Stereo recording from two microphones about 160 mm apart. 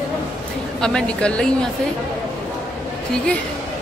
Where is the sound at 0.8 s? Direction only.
5° left (ahead or behind).